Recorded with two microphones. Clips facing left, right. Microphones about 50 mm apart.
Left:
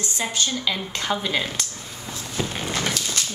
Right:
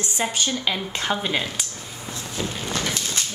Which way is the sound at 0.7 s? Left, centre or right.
Centre.